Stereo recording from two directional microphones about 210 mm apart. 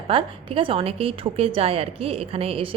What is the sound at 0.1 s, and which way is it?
A woman's voice, 25° right (ahead or behind).